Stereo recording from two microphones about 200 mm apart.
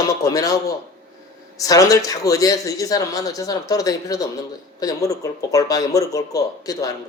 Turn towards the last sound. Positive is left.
turn(degrees=15)  # may be behind; listen again after turning